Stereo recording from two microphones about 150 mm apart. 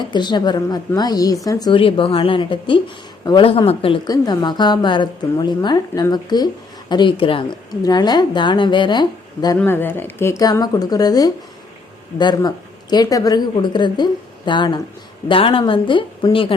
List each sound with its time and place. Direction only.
0.1 s a woman's voice: 30° left (ahead or behind)
9.6 s a woman's voice: 15° left (ahead or behind); by 16.5 s 35° left (ahead or behind)